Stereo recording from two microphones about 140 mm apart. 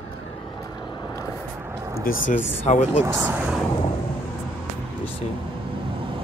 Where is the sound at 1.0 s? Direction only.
30° left (ahead or behind).